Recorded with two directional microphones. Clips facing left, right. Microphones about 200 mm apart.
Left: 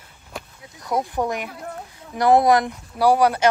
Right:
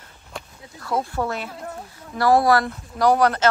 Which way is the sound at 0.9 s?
15° left (ahead or behind).